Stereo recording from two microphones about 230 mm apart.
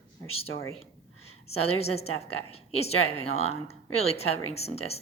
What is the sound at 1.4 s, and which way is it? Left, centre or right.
Speech, left.